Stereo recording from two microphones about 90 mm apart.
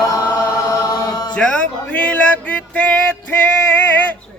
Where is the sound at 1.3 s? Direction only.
10° left (ahead or behind).